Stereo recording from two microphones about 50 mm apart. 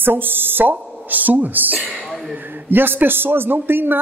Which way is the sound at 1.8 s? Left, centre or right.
Right.